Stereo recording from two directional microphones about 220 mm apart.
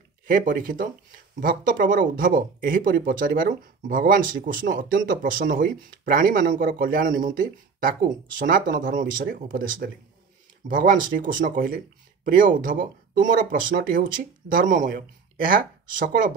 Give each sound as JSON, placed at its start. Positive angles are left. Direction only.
{"t": 0.3, "sound": "speech", "side_deg": -40}